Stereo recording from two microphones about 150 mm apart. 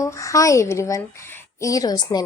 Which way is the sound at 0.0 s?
20° left (ahead or behind).